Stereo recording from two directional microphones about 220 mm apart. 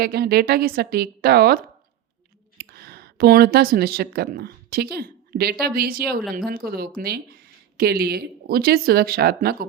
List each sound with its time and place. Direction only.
0.0 s speech: 45° right (ahead or behind)
2.6 s speech: 45° right (ahead or behind)